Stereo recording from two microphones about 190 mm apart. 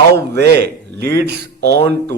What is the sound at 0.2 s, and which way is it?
A man's voice, 60° right (ahead or behind).